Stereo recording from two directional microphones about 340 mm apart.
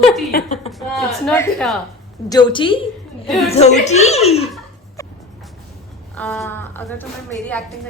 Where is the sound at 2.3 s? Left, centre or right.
Centre.